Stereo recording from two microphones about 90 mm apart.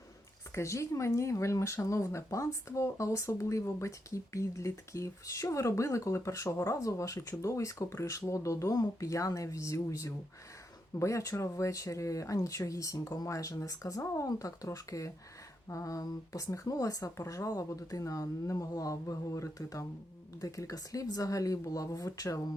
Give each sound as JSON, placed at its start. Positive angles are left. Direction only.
{"t": 0.5, "sound": "speech", "side_deg": 35}